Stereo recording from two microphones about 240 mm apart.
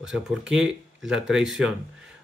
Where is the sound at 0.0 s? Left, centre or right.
Centre.